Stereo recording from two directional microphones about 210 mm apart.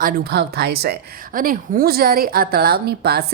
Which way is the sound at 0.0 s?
45° right (ahead or behind).